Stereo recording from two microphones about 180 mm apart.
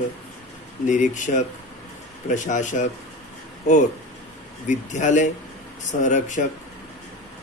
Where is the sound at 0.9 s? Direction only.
45° left (ahead or behind).